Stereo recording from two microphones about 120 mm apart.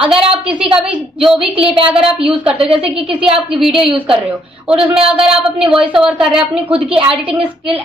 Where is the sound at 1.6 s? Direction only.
5° right (ahead or behind).